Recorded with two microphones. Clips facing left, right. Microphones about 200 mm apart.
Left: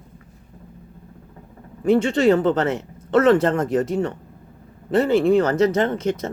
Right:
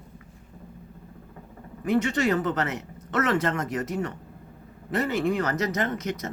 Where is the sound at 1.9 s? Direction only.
30° left (ahead or behind).